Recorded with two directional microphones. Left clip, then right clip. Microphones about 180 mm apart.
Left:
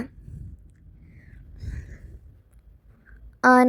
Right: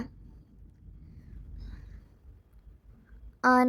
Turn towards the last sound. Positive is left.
turn(degrees=25)  # may be behind; listen again after turning